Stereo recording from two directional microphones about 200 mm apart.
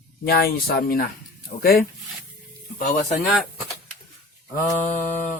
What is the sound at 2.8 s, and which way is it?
Speech, 40° left (ahead or behind).